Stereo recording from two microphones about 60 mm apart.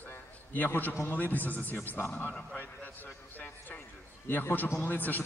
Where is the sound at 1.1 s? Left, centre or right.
Left.